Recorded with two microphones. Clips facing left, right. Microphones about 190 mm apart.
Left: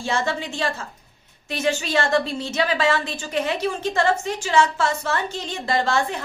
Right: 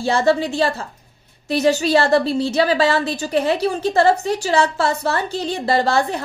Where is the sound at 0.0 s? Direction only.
35° right (ahead or behind).